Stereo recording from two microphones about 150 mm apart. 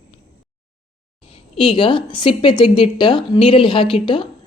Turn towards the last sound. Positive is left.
turn(degrees=35)  # may be behind; listen again after turning